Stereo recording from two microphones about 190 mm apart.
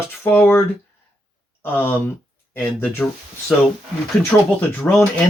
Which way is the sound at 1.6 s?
10° left (ahead or behind).